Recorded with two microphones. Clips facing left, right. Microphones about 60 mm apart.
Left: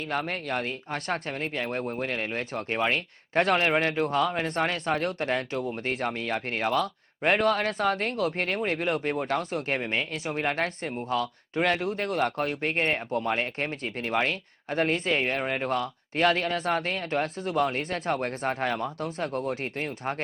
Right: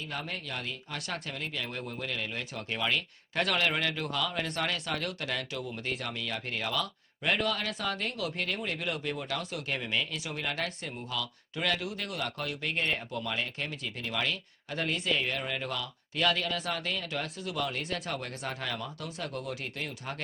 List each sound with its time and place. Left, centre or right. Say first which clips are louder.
0.1 s speech: left 10 dB; left